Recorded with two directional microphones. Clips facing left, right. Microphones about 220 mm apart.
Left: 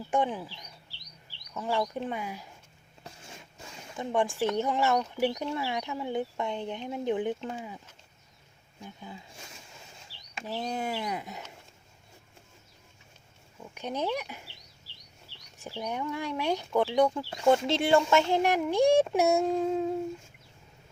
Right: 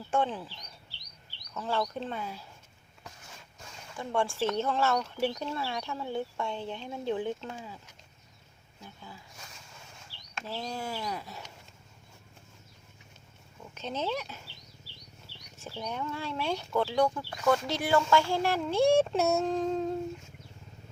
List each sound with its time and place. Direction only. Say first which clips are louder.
0.1 s speech: left 1 dB; 15° left (ahead or behind)
1.5 s speech: left 2 dB; 15° left (ahead or behind)
3.9 s speech: left 2 dB; 20° left (ahead or behind)
8.8 s speech: left 4 dB; 20° left (ahead or behind)
10.4 s speech: left 4 dB; 20° left (ahead or behind)
13.7 s speech: left 2 dB; 15° left (ahead or behind)
15.5 s speech: left 2 dB; 15° left (ahead or behind)